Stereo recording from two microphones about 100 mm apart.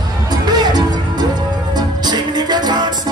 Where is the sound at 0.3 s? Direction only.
45° right (ahead or behind).